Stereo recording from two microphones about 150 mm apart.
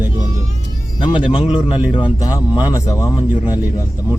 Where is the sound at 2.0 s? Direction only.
25° left (ahead or behind).